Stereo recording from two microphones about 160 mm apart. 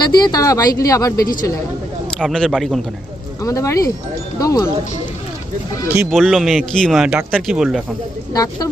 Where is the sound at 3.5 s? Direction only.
20° left (ahead or behind).